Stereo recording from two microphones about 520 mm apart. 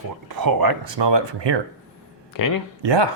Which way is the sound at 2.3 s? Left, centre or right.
Left.